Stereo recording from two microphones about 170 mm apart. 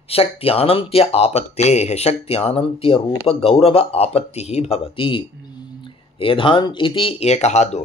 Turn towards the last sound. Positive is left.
turn(degrees=40)  # may be behind; listen again after turning